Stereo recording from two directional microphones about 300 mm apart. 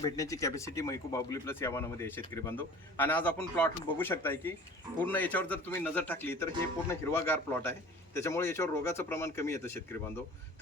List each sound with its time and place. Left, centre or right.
0.0 s speech: centre